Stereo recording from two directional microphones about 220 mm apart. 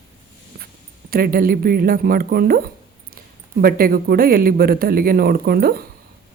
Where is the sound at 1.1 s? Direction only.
40° right (ahead or behind).